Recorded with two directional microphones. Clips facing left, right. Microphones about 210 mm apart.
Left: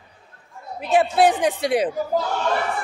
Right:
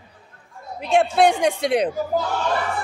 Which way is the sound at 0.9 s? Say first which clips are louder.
Even; 5° left (ahead or behind).